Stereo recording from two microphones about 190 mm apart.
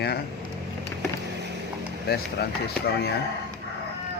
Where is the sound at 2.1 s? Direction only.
55° left (ahead or behind).